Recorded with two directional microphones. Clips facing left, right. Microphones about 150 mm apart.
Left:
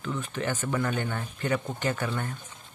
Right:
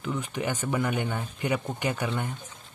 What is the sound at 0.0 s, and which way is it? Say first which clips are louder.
Speech: right 1 dB; 15° right (ahead or behind).